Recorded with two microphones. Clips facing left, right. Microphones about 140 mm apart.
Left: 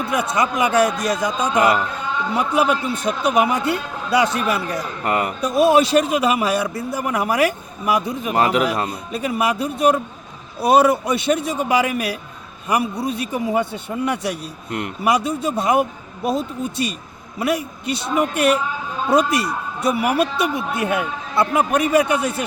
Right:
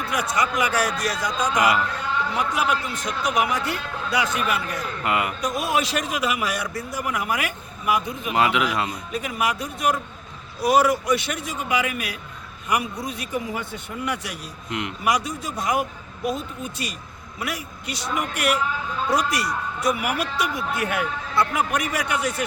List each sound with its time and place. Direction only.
0.0 s a man's voice: 25° left (ahead or behind)